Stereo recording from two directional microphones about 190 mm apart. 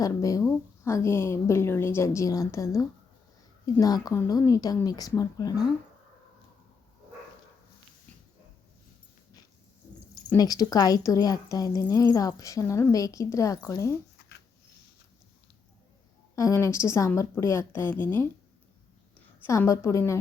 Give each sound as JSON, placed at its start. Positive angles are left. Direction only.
{"t": 0.0, "sound": "a woman's voice", "side_deg": 15}
{"t": 10.3, "sound": "a woman's voice", "side_deg": 20}
{"t": 16.3, "sound": "a woman's voice", "side_deg": 15}
{"t": 19.5, "sound": "a woman's voice", "side_deg": 15}